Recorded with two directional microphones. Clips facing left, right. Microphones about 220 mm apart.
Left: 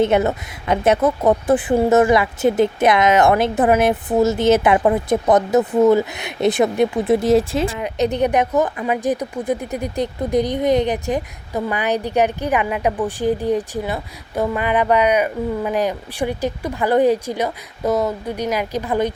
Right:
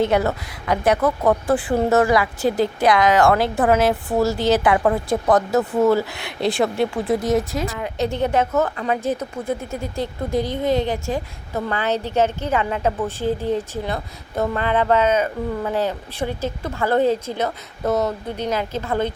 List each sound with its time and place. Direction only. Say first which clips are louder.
0.0 s a woman's voice: left 3 dB; 20° left (ahead or behind)